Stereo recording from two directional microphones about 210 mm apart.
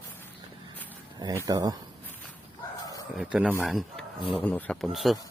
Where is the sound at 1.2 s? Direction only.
15° right (ahead or behind).